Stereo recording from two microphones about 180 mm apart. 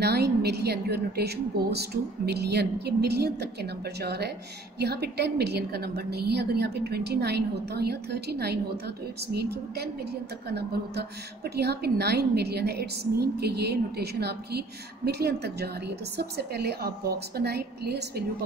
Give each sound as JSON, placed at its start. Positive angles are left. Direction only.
{"t": 0.0, "sound": "a woman's voice", "side_deg": -65}